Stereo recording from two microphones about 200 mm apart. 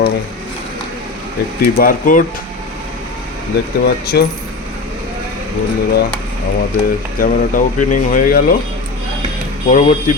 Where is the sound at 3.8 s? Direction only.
55° left (ahead or behind).